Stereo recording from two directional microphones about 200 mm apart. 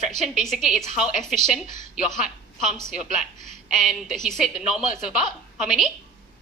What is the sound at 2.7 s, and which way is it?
A woman's voice, centre (ahead or behind).